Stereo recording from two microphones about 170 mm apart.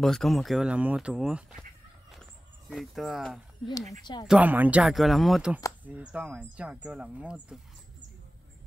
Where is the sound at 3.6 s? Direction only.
20° left (ahead or behind).